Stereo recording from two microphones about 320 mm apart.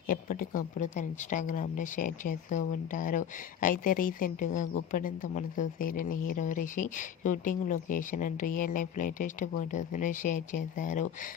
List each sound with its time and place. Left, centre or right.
0.1 s speech: left